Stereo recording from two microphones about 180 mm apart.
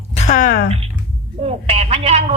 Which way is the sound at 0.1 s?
40° left (ahead or behind).